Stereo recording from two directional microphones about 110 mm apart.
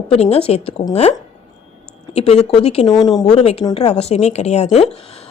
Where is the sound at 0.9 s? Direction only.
75° left (ahead or behind).